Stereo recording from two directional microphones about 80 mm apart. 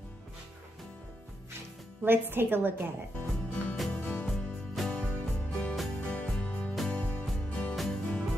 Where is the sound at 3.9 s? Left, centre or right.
Centre.